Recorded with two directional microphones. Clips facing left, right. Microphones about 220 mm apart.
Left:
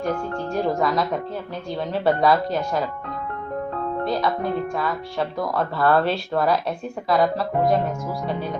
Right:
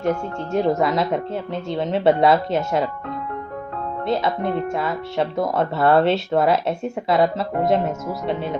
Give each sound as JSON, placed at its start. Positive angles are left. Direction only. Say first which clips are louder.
{"t": 0.0, "sound": "speech", "louder": "right 2 dB", "side_deg": -25}
{"t": 4.0, "sound": "speech", "louder": "right 3 dB", "side_deg": -25}